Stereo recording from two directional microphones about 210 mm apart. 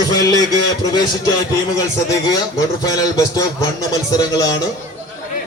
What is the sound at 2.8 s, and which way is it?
A man's voice, 15° left (ahead or behind).